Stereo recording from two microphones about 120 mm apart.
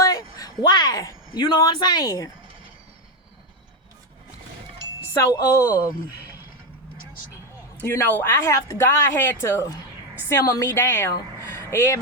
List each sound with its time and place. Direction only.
0.1 s speech: 30° left (ahead or behind)
5.1 s speech: 25° left (ahead or behind)
5.7 s speech: 15° right (ahead or behind)
7.8 s a woman's voice: 15° left (ahead or behind)